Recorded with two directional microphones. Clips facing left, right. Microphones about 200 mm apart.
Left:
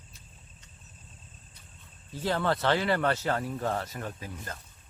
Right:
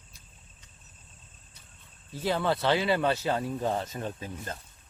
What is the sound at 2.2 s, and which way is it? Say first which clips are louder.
Speech: right 1 dB; 10° right (ahead or behind).